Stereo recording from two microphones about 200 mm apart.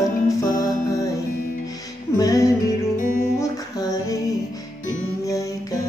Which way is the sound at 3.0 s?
45° left (ahead or behind).